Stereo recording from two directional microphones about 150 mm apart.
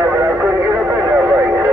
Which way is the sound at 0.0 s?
10° right (ahead or behind).